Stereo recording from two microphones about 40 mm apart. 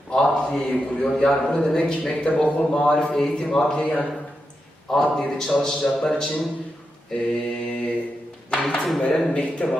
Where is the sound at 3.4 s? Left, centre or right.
Centre.